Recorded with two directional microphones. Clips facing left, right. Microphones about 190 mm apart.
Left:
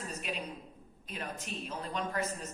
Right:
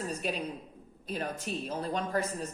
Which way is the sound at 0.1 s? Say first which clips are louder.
Right 5 dB; 35° right (ahead or behind).